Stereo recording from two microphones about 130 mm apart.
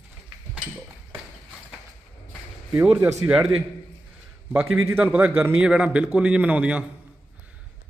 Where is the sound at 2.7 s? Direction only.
15° right (ahead or behind).